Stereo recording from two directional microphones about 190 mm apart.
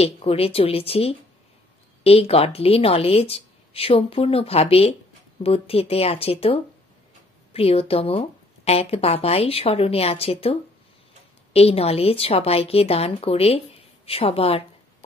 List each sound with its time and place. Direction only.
0.0 s a woman's voice: 30° left (ahead or behind)